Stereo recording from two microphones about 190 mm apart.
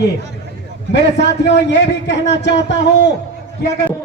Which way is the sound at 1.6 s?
65° left (ahead or behind).